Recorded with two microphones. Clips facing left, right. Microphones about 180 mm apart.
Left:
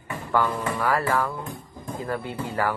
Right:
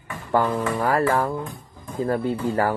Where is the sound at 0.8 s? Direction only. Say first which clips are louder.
Right 3 dB; 35° right (ahead or behind).